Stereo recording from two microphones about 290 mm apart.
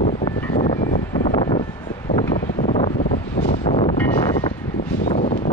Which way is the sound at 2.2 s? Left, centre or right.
Centre.